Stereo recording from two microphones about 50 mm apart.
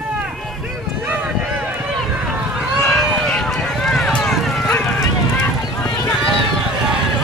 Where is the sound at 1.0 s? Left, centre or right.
Right.